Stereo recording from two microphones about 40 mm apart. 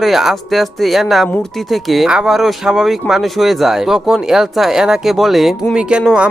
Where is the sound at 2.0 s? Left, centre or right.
Centre.